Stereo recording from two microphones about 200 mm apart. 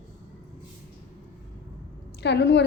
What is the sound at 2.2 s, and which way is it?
Speech, 60° left (ahead or behind).